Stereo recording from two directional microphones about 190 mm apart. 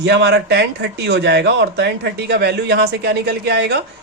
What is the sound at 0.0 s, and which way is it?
Speech, 65° right (ahead or behind).